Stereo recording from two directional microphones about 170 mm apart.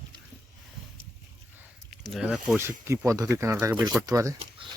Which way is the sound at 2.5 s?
15° right (ahead or behind).